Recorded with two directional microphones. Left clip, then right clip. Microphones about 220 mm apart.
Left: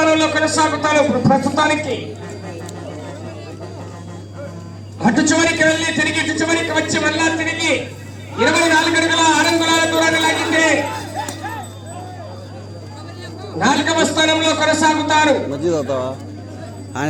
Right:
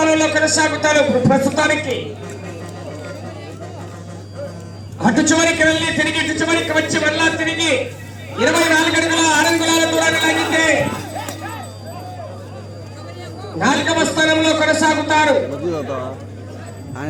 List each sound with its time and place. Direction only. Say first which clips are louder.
0.0 s a man's voice: even; 25° left (ahead or behind)
4.9 s a man's voice: even; 30° left (ahead or behind)
8.4 s a sound: even; 20° left (ahead or behind)
13.6 s a man's voice: left 1 dB; 25° left (ahead or behind)